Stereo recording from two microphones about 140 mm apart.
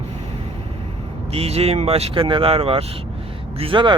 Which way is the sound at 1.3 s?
45° right (ahead or behind).